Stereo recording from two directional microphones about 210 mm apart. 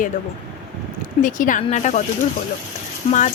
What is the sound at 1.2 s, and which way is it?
Speech, 40° left (ahead or behind).